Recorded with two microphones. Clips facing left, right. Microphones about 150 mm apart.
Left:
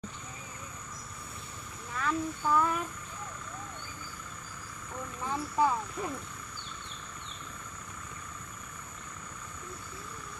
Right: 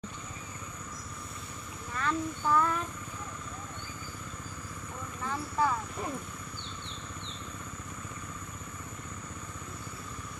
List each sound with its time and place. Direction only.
2.0 s a child's voice: 5° left (ahead or behind)
5.6 s a child's voice: 15° left (ahead or behind)